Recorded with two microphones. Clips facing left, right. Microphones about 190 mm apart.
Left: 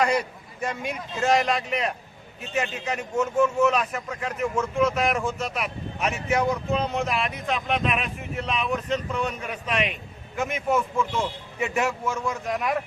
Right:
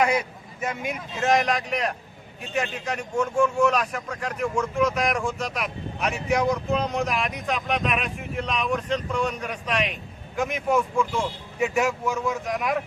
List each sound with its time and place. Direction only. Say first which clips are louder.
0.6 s a man's voice: even; 5° right (ahead or behind)